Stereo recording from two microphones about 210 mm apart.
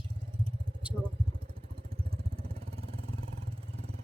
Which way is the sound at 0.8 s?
5° right (ahead or behind).